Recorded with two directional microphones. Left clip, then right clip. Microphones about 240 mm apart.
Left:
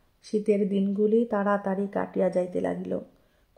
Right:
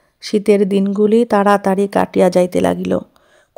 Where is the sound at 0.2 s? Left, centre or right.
Right.